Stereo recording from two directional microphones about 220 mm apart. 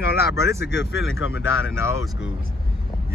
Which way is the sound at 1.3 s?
65° left (ahead or behind).